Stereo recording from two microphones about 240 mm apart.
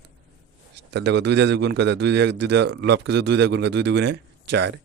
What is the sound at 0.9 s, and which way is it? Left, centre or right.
A man's voice, right.